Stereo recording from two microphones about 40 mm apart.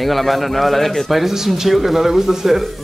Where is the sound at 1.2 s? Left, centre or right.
Centre.